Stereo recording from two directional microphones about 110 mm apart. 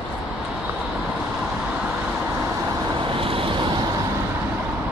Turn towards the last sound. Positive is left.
turn(degrees=-50)  # may be behind; listen again after turning